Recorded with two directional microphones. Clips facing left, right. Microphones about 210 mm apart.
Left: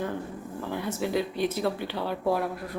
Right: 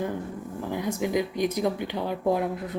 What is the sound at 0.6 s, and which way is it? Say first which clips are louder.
Speech: right 2 dB; 15° right (ahead or behind).